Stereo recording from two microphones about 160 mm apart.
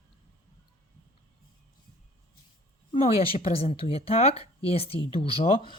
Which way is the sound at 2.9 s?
35° left (ahead or behind).